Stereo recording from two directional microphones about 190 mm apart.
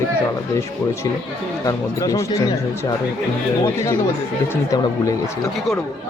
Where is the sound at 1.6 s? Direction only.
15° left (ahead or behind).